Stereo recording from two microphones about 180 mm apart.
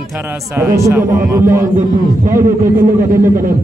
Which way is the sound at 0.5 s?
15° right (ahead or behind).